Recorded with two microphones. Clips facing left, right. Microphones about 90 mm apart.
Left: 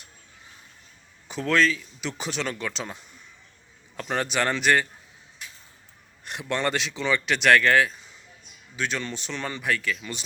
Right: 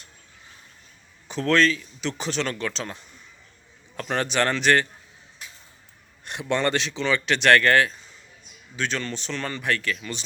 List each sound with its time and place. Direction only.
1.3 s a man's voice: 5° left (ahead or behind)
6.5 s a man's voice: 5° left (ahead or behind)